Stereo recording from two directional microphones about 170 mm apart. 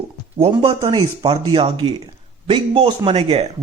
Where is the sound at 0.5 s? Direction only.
25° right (ahead or behind).